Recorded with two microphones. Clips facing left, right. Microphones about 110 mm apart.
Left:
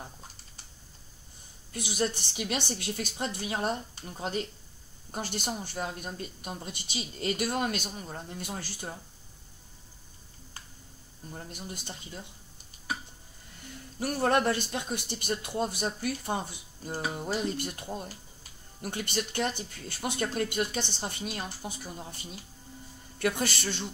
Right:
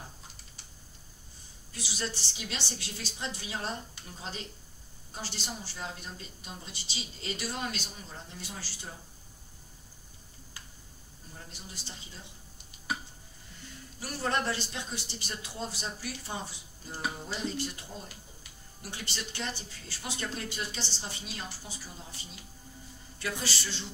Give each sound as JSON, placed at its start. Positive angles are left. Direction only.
{"t": 1.7, "sound": "speech", "side_deg": 55}
{"t": 5.1, "sound": "speech", "side_deg": 55}
{"t": 11.5, "sound": "speech", "side_deg": 55}
{"t": 13.9, "sound": "speech", "side_deg": 55}